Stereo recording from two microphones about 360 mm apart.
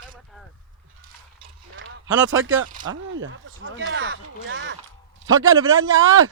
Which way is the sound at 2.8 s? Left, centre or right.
Right.